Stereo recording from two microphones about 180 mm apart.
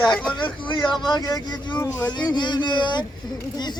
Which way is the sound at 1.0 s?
25° left (ahead or behind).